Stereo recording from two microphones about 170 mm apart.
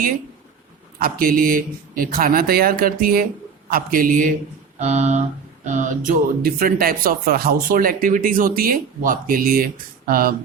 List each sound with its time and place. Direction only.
0.9 s speech: 60° right (ahead or behind)
4.8 s a sound: 45° right (ahead or behind)
5.6 s speech: 45° right (ahead or behind)